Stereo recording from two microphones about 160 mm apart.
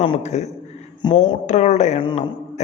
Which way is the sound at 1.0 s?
25° left (ahead or behind).